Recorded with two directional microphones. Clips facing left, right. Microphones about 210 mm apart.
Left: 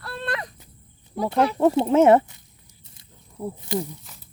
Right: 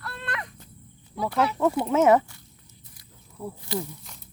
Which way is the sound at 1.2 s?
30° left (ahead or behind).